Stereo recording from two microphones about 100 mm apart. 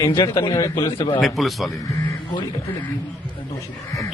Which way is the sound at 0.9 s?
55° left (ahead or behind).